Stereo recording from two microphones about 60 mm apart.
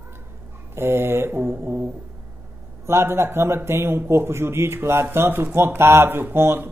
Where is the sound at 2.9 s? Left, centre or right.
Right.